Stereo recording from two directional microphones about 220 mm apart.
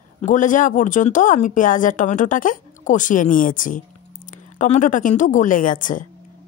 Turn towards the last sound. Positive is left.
turn(degrees=35)  # may be behind; listen again after turning